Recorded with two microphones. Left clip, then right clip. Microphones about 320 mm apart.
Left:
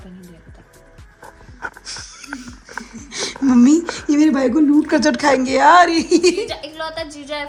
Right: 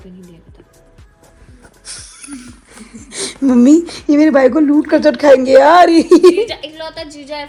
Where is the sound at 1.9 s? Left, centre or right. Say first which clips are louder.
Left 1 dB; centre.